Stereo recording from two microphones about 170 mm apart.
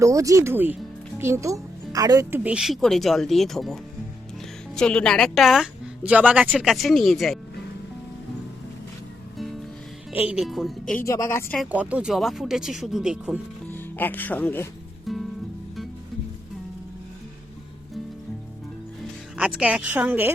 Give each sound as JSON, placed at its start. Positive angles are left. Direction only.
{"t": 0.0, "sound": "a woman's voice", "side_deg": -20}
{"t": 2.4, "sound": "a woman's voice", "side_deg": -5}
{"t": 10.1, "sound": "a woman's voice", "side_deg": -10}
{"t": 11.0, "sound": "a woman's voice", "side_deg": 15}
{"t": 11.5, "sound": "a woman's voice", "side_deg": -5}
{"t": 13.7, "sound": "speech", "side_deg": 10}
{"t": 15.1, "sound": "music", "side_deg": 0}
{"t": 19.4, "sound": "a woman's voice", "side_deg": -5}